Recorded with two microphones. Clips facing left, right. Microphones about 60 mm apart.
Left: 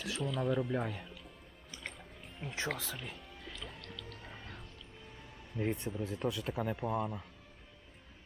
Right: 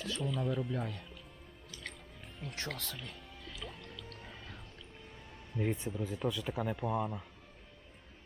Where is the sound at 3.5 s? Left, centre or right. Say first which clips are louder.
Right 2 dB; centre.